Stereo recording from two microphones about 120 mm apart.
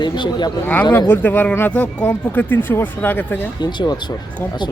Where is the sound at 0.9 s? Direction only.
15° left (ahead or behind).